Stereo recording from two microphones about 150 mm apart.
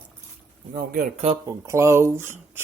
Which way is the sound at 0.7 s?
75° right (ahead or behind).